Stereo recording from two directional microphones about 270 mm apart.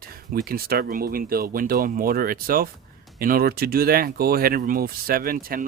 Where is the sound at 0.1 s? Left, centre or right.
Right.